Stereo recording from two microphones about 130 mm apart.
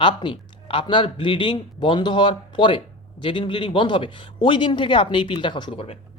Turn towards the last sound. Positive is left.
turn(degrees=45)  # may be behind; listen again after turning